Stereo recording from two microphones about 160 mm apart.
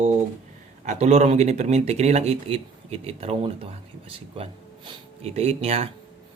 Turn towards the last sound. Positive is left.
turn(degrees=-40)  # may be behind; listen again after turning